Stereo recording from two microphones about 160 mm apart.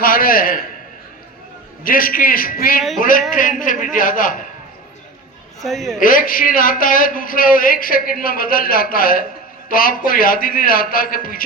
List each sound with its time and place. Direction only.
0.0 s speech: 60° left (ahead or behind)
1.8 s speech: 60° left (ahead or behind)
5.6 s a woman's voice: centre (ahead or behind)
6.0 s speech: 60° left (ahead or behind)